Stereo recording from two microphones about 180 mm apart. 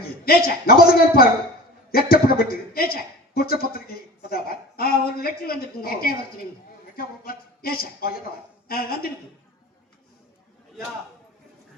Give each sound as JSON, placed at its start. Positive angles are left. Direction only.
{"t": 0.3, "sound": "a woman's voice", "side_deg": 55}